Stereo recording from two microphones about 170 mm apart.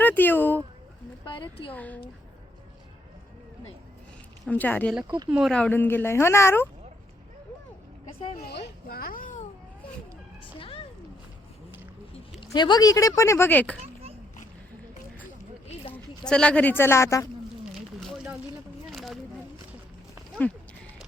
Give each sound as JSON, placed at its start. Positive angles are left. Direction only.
{"t": 0.0, "sound": "speech", "side_deg": 10}
{"t": 1.2, "sound": "speech", "side_deg": 30}
{"t": 1.7, "sound": "speech", "side_deg": 10}
{"t": 4.4, "sound": "speech", "side_deg": 10}
{"t": 5.0, "sound": "speech", "side_deg": -25}
{"t": 5.3, "sound": "speech", "side_deg": 0}
{"t": 8.4, "sound": "children playing", "side_deg": 75}
{"t": 12.5, "sound": "speech", "side_deg": 25}
{"t": 15.9, "sound": "speech", "side_deg": 5}
{"t": 17.7, "sound": "a sound", "side_deg": -5}